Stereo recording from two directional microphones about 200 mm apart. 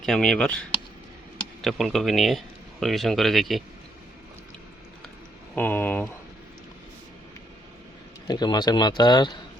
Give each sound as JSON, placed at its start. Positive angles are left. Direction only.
{"t": 0.0, "sound": "speech", "side_deg": 0}
{"t": 1.6, "sound": "speech", "side_deg": 0}
{"t": 5.5, "sound": "speech", "side_deg": 10}
{"t": 8.3, "sound": "speech", "side_deg": 20}